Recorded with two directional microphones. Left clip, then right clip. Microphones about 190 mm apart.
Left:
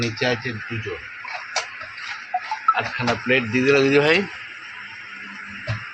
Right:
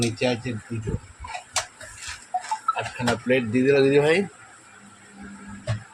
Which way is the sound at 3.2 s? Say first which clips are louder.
Left 2 dB; 5° right (ahead or behind).